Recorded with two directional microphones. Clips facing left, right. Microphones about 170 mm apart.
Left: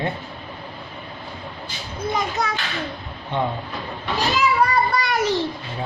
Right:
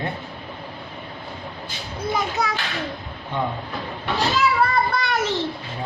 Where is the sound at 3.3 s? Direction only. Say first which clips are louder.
Left 2 dB; 25° left (ahead or behind).